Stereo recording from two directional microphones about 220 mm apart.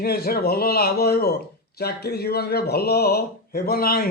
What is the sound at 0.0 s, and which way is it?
Speech, 45° left (ahead or behind).